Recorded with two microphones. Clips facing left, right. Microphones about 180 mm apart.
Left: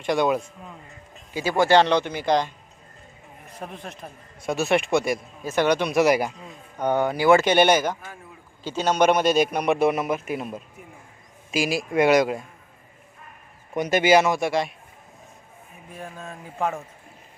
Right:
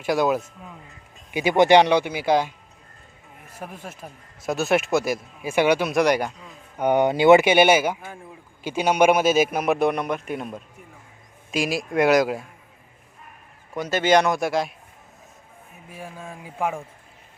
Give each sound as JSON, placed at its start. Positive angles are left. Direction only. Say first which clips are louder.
{"t": 0.0, "sound": "a man's voice", "louder": "right 1 dB", "side_deg": -5}
{"t": 1.3, "sound": "speech", "louder": "right 3 dB", "side_deg": -15}
{"t": 3.5, "sound": "a man's voice", "louder": "even", "side_deg": -5}
{"t": 6.7, "sound": "speech", "louder": "right 3 dB", "side_deg": -15}
{"t": 7.4, "sound": "a man's voice", "louder": "right 1 dB", "side_deg": -10}
{"t": 13.7, "sound": "a man's voice", "louder": "left 1 dB", "side_deg": 15}
{"t": 15.9, "sound": "speech", "louder": "even", "side_deg": -10}